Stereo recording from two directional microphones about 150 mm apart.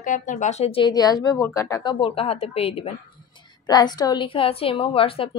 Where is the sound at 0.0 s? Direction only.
60° left (ahead or behind); by 2.9 s 40° left (ahead or behind).